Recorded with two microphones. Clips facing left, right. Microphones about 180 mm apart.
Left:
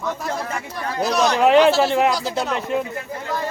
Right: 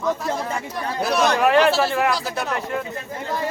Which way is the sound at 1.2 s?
20° left (ahead or behind).